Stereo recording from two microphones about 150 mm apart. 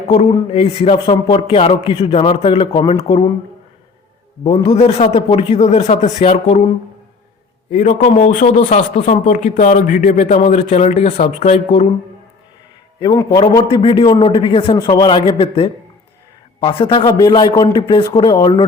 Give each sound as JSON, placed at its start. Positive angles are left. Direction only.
{"t": 0.1, "sound": "a man's voice", "side_deg": 45}
{"t": 4.4, "sound": "a man's voice", "side_deg": 40}
{"t": 7.7, "sound": "a man's voice", "side_deg": 60}
{"t": 13.6, "sound": "a man's voice", "side_deg": 30}
{"t": 14.8, "sound": "a man's voice", "side_deg": 20}
{"t": 17.0, "sound": "speech", "side_deg": 25}